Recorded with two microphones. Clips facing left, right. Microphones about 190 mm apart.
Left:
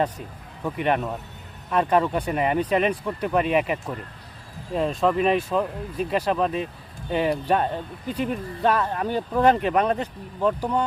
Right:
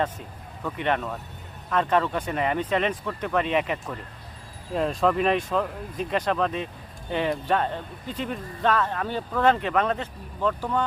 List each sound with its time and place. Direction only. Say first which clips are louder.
0.6 s speech: left 3 dB; 15° left (ahead or behind)